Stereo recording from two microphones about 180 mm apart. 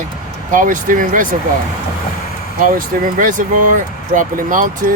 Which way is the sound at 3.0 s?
50° right (ahead or behind).